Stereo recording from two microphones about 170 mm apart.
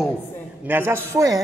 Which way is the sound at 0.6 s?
10° right (ahead or behind).